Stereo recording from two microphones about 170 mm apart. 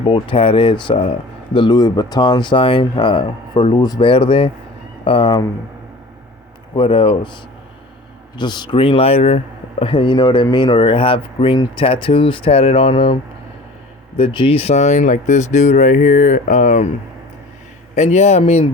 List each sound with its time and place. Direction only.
0.0 s speech: 30° left (ahead or behind)
6.7 s speech: 30° left (ahead or behind)
8.4 s speech: 25° left (ahead or behind)
14.2 s speech: 30° left (ahead or behind)
17.9 s speech: 40° left (ahead or behind)